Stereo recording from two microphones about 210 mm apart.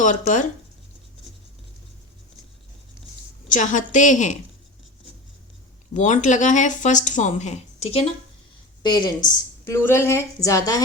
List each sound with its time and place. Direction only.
0.0 s speech: 35° left (ahead or behind)
3.5 s speech: 35° left (ahead or behind)
5.9 s speech: 35° left (ahead or behind)
8.8 s a woman's voice: 20° left (ahead or behind)